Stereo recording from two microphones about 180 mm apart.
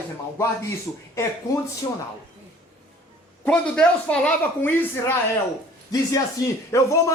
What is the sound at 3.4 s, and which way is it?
Speech, 5° left (ahead or behind).